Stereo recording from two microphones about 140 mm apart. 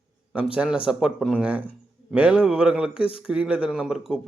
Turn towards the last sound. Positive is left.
turn(degrees=-5)  # may be behind; listen again after turning